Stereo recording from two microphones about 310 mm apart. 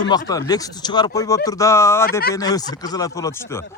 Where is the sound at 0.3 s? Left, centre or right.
Centre.